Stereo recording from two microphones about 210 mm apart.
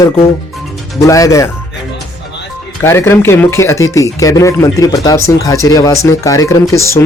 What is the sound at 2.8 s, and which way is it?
Speech, 10° left (ahead or behind).